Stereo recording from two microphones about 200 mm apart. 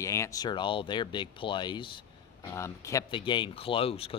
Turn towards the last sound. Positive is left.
turn(degrees=30)  # may be behind; listen again after turning